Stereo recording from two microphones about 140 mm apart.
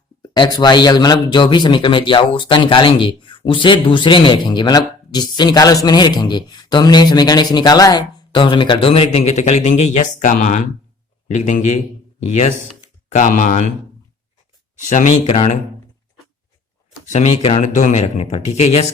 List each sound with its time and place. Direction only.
0.2 s speech: 30° left (ahead or behind); by 13.7 s 65° left (ahead or behind)
14.8 s speech: 60° left (ahead or behind)
17.1 s speech: 50° left (ahead or behind)